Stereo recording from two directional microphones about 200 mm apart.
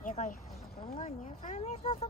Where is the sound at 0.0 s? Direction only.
40° left (ahead or behind).